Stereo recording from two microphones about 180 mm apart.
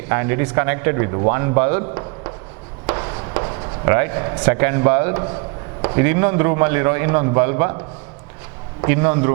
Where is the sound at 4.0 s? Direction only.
20° right (ahead or behind).